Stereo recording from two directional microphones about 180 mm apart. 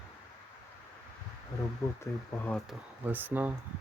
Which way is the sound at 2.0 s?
15° left (ahead or behind).